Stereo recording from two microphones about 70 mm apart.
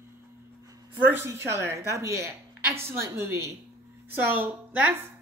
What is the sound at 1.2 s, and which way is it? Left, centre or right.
Speech, right.